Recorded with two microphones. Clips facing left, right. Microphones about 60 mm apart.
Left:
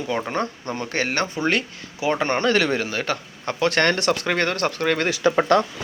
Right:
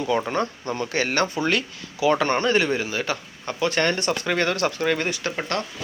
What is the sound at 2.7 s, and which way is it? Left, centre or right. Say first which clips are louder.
Speech: left 1 dB; left.